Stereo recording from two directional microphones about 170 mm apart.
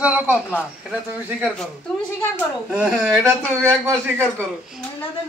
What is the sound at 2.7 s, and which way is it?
A man's voice, 5° right (ahead or behind).